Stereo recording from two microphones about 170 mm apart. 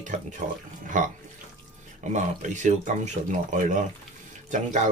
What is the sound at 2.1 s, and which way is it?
Speech, 45° right (ahead or behind).